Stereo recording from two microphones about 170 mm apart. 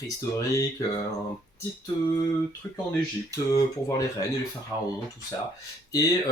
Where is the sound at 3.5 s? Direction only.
20° left (ahead or behind).